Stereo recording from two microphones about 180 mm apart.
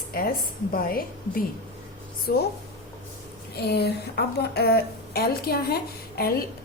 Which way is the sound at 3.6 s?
65° left (ahead or behind).